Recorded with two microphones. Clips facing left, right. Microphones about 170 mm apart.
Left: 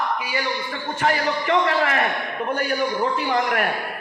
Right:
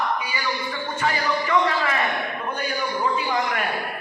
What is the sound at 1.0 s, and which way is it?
A man's voice, 65° left (ahead or behind).